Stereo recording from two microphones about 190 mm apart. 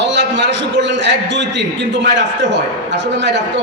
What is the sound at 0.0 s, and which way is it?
A man's voice, 70° right (ahead or behind).